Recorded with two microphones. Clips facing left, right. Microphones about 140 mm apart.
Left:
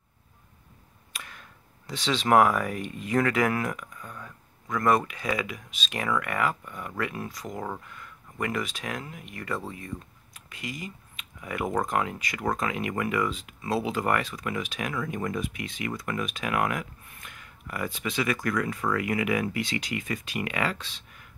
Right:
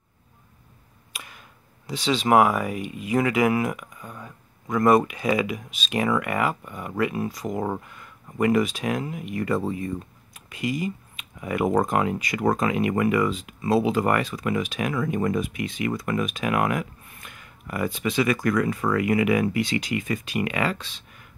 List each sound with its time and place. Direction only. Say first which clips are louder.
1.1 s speech: right 1 dB; 10° right (ahead or behind)
7.6 s speech: right 6 dB; 20° right (ahead or behind)
11.9 s speech: right 5 dB; 15° right (ahead or behind)
15.1 s speech: right 8 dB; 25° right (ahead or behind)
15.4 s speech: right 6 dB; 10° right (ahead or behind)